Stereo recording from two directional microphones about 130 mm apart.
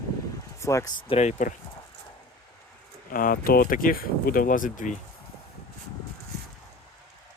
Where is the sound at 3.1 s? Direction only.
90° left.